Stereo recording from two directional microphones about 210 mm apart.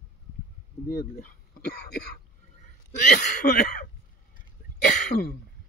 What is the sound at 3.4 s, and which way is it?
Throat clearing, 50° left (ahead or behind).